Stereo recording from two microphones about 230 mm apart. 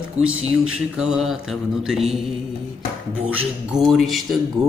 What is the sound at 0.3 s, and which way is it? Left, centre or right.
Speech, right.